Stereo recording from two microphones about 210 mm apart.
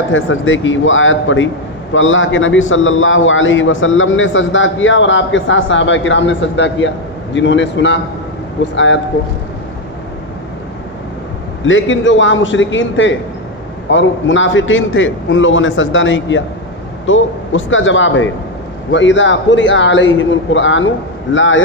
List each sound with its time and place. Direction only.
0.1 s a man's voice: 65° left (ahead or behind)
11.6 s a man's voice: 65° left (ahead or behind)